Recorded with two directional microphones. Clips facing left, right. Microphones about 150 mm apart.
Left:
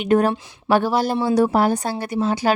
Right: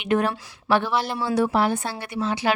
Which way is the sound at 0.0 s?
40° left (ahead or behind).